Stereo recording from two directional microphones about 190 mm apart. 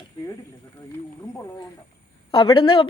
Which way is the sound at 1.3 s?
15° left (ahead or behind).